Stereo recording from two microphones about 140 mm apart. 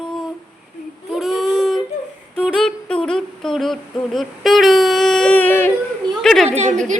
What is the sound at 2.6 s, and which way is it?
Humming, 5° left (ahead or behind).